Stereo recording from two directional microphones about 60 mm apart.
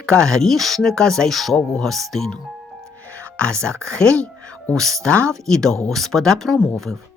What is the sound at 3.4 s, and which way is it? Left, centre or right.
Speech, centre.